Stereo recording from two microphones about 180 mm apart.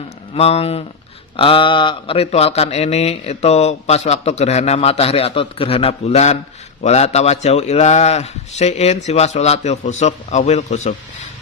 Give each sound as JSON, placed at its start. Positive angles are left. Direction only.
{"t": 0.3, "sound": "speech", "side_deg": 35}